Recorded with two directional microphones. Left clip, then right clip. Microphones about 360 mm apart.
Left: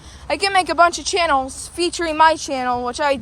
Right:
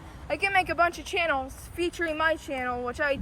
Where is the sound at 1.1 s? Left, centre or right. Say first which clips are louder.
Left 9 dB; centre.